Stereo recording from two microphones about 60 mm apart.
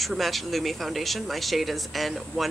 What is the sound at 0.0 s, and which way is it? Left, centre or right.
Speech, centre.